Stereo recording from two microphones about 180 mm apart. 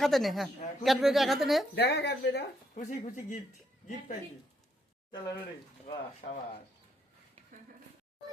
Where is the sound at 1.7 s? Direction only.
65° left (ahead or behind).